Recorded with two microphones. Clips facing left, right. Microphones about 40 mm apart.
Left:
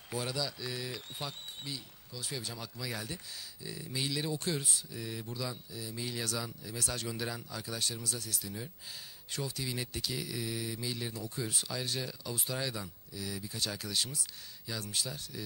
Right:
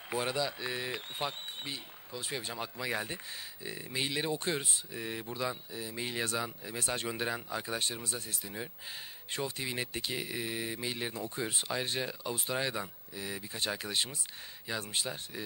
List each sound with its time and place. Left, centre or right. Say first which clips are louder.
0.1 s speech: right 4 dB; right